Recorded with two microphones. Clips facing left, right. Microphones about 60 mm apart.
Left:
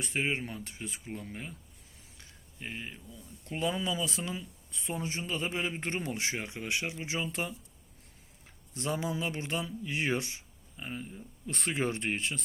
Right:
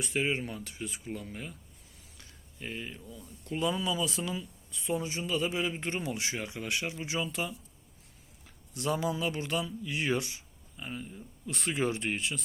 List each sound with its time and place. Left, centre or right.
0.0 s speech: left
2.1 s a sound: centre
3.4 s speech: left